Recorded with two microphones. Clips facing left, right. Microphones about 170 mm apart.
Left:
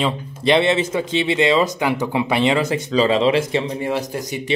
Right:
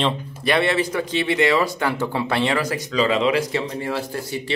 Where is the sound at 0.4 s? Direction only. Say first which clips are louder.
Left 4 dB; 20° left (ahead or behind).